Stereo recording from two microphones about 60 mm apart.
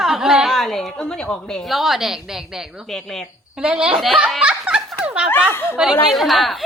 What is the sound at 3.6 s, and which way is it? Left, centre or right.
Speech, centre.